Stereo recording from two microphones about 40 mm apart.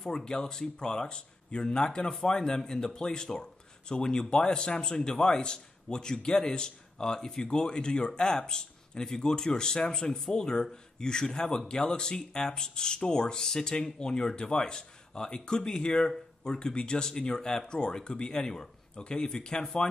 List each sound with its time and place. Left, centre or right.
0.2 s a man's voice: centre